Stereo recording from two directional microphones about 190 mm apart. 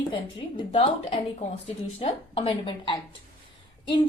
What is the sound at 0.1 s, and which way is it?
A woman's voice, 25° left (ahead or behind).